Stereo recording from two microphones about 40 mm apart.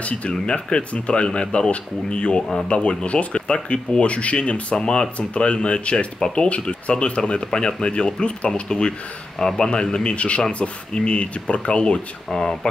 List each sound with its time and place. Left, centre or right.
0.0 s speech: left
0.3 s speech: left
9.4 s a man's voice: centre
10.1 s speech: left